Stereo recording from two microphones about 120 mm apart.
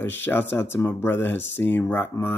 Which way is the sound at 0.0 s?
15° left (ahead or behind).